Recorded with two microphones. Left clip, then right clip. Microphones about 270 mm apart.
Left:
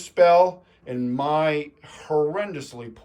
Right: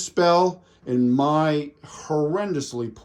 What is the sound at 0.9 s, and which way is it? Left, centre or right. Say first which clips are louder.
Speech: right 3 dB; centre.